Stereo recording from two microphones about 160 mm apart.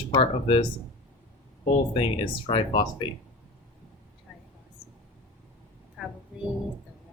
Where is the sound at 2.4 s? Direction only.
30° left (ahead or behind).